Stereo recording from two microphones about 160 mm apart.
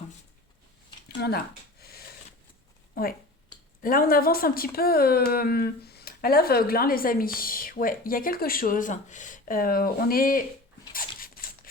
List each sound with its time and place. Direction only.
1.0 s speech: 75° left (ahead or behind)
1.8 s a sound: 75° left (ahead or behind)
2.9 s speech: 65° left (ahead or behind)
11.2 s zipper: 65° left (ahead or behind)